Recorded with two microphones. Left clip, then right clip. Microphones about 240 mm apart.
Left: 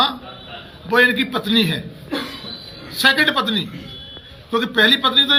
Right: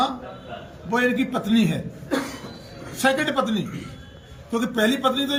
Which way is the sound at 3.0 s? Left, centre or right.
Centre.